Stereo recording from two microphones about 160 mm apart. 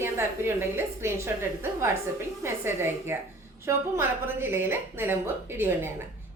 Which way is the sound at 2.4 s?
15° right (ahead or behind).